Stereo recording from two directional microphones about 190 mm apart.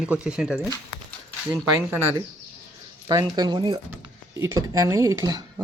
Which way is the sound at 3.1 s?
20° right (ahead or behind).